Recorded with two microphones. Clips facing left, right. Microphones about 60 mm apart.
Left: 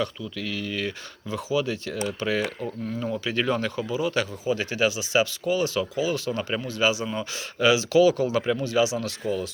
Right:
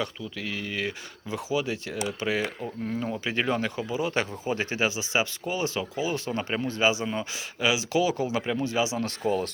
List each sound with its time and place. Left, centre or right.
0.0 s speech: centre
2.8 s speech: right
9.0 s speech: right